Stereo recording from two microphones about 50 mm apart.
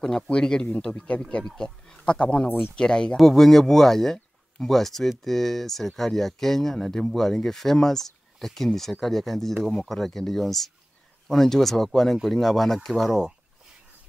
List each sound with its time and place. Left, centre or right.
0.0 s speech: centre
2.4 s speech: left
2.7 s speech: centre
3.2 s speech: centre